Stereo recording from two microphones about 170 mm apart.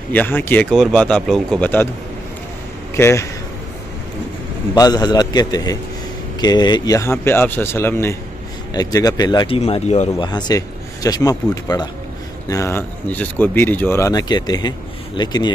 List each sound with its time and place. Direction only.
0.1 s speech: 10° left (ahead or behind)
3.0 s speech: 15° left (ahead or behind)
4.7 s speech: 25° left (ahead or behind)
9.6 s speech: 40° left (ahead or behind)
10.1 s speech: 25° left (ahead or behind)